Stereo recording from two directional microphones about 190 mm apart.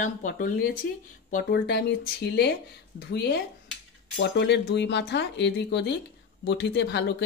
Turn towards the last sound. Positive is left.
turn(degrees=65)  # may be behind; listen again after turning